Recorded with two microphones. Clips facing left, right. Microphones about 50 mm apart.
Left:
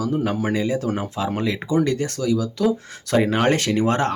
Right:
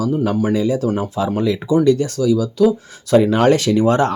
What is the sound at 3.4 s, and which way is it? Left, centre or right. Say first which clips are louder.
Speech: right 5 dB; left.